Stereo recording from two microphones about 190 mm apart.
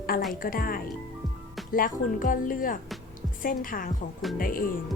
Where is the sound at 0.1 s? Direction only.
50° left (ahead or behind).